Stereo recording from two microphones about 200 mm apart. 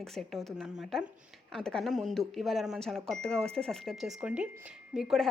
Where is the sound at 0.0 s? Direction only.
Centre (ahead or behind).